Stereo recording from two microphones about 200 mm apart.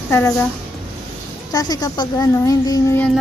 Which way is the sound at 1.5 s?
20° left (ahead or behind).